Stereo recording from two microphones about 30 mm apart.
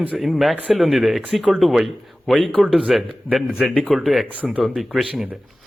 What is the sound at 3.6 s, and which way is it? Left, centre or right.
Speech, centre.